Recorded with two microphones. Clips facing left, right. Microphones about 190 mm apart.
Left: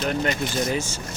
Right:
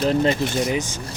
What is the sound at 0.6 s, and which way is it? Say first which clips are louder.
Speech: right 2 dB; 15° right (ahead or behind).